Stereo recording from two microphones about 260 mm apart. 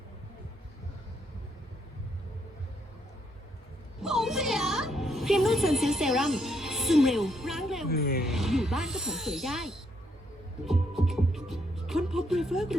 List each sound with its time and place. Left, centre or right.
4.0 s music: centre
7.9 s speech: left
8.2 s speech: centre
10.7 s music: centre